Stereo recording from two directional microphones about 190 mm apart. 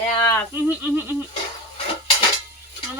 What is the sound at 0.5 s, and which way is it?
Speech, 10° right (ahead or behind).